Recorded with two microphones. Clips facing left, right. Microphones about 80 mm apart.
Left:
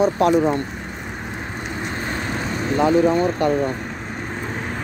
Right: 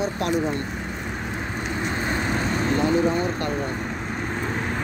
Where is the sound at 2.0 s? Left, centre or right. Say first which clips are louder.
Right 1 dB; centre.